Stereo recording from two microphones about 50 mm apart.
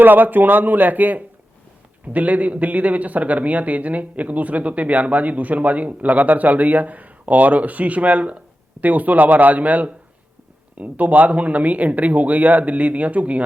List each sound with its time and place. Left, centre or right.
0.0 s a man's voice: right